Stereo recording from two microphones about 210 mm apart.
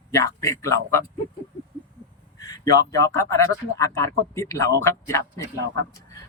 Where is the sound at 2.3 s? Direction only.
15° left (ahead or behind).